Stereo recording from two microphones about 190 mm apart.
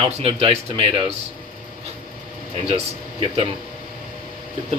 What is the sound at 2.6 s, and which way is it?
Speech, 30° right (ahead or behind).